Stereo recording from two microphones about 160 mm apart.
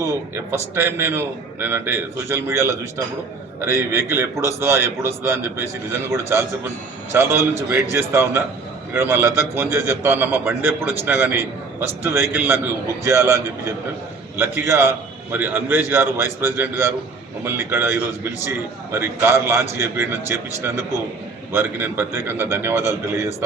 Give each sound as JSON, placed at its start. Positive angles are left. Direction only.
{"t": 0.0, "sound": "a man's voice", "side_deg": -15}
{"t": 21.5, "sound": "a man's voice", "side_deg": -10}